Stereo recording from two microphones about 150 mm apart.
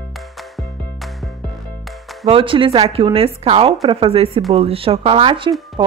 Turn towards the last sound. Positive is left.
turn(degrees=-35)  # may be behind; listen again after turning